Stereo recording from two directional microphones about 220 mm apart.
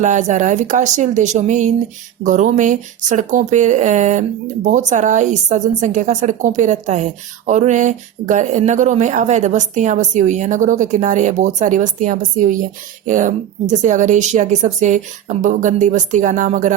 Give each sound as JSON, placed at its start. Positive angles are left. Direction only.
{"t": 0.0, "sound": "speech", "side_deg": -35}